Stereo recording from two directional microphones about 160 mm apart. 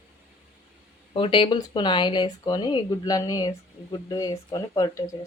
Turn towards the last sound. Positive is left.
turn(degrees=20)  # may be behind; listen again after turning